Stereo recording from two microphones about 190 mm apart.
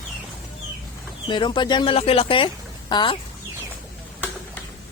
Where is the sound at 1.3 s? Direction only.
25° left (ahead or behind).